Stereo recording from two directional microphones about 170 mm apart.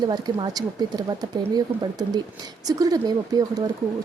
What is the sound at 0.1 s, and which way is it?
A woman's voice, 25° right (ahead or behind).